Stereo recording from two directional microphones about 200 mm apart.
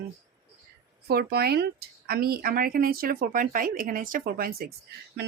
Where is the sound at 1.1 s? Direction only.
55° right (ahead or behind).